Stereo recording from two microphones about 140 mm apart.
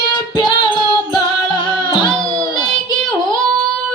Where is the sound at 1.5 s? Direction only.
35° left (ahead or behind).